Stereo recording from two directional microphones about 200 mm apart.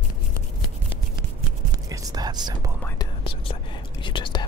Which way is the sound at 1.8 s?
20° right (ahead or behind).